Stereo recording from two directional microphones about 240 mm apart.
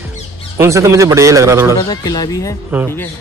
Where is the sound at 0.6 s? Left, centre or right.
Centre.